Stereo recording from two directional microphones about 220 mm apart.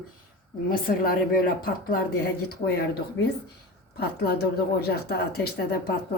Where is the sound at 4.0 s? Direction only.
45° left (ahead or behind).